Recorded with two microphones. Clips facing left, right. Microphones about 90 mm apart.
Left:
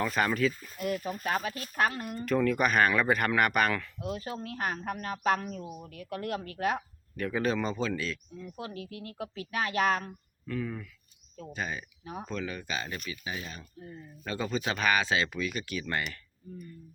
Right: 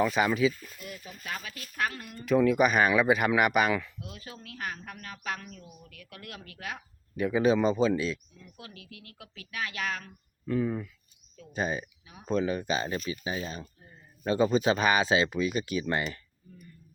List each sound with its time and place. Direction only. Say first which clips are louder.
0.0 s speech: right 3 dB; 5° right (ahead or behind)
0.8 s speech: left 11 dB; 55° left (ahead or behind); by 2.2 s 30° left (ahead or behind)
2.2 s speech: right 4 dB; 5° right (ahead or behind)
4.0 s speech: left 9 dB; 30° left (ahead or behind)
7.2 s speech: right 5 dB; 10° right (ahead or behind)
8.5 s speech: left 8 dB; 30° left (ahead or behind)
10.4 s speech: right 6 dB; 25° right (ahead or behind)